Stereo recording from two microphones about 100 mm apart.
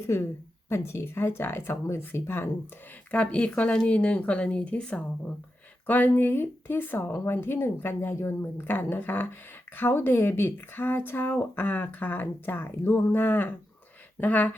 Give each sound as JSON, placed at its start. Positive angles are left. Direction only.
{"t": 0.0, "sound": "speech", "side_deg": 25}
{"t": 3.1, "sound": "speech", "side_deg": 10}